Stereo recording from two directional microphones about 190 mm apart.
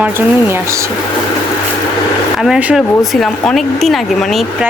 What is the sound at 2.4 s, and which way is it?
Speech, 5° right (ahead or behind).